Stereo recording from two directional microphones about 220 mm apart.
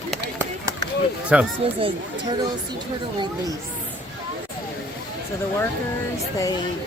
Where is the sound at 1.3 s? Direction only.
5° right (ahead or behind).